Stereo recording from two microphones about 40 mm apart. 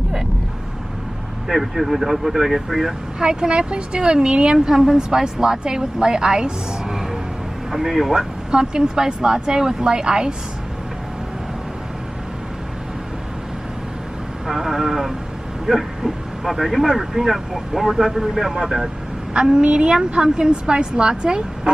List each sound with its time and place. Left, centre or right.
1.5 s speech: centre
3.2 s speech: right; by 8.2 s centre
8.2 s speech: right
14.5 s a sound: centre
15.6 s speech: centre
19.5 s speech: right